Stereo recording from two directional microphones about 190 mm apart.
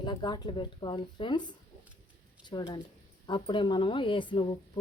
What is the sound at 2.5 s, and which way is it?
A woman's voice, 25° left (ahead or behind).